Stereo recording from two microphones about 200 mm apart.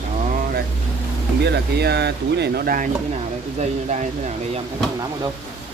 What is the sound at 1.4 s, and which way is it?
Speech, 55° right (ahead or behind).